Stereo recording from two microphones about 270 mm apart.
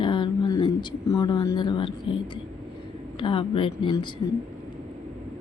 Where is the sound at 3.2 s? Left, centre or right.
Centre.